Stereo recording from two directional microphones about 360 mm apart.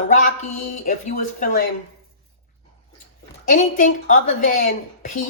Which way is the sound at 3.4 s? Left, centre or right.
Left.